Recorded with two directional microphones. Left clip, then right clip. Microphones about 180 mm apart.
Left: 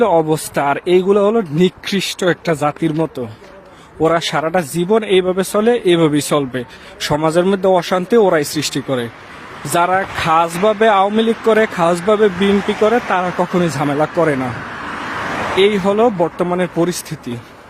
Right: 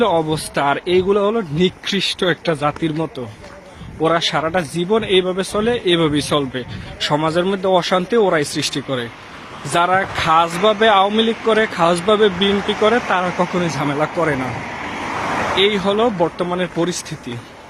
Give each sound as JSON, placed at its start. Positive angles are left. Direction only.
{"t": 0.0, "sound": "speech", "side_deg": 45}
{"t": 12.5, "sound": "speech", "side_deg": 0}
{"t": 12.8, "sound": "speech", "side_deg": 50}
{"t": 15.2, "sound": "vehicle", "side_deg": 0}
{"t": 15.6, "sound": "speech", "side_deg": 50}